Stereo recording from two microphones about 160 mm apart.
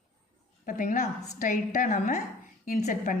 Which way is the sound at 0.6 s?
55° left (ahead or behind).